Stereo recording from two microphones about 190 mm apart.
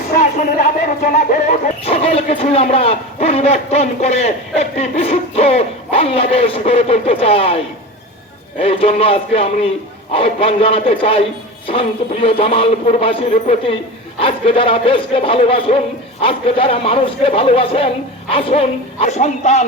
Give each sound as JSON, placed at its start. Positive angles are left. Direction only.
{"t": 0.1, "sound": "a sound", "side_deg": 40}
{"t": 1.0, "sound": "speech", "side_deg": 40}
{"t": 8.6, "sound": "a man's voice", "side_deg": 30}